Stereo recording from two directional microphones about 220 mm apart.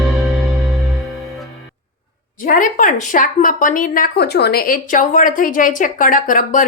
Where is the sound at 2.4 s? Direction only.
35° left (ahead or behind).